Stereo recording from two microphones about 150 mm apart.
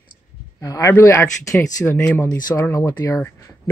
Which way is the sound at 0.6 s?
25° left (ahead or behind).